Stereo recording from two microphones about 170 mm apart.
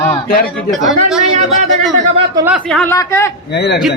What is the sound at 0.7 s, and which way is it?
Speech, centre (ahead or behind).